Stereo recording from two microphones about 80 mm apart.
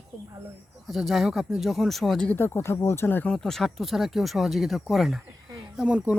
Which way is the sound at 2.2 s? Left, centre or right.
Left.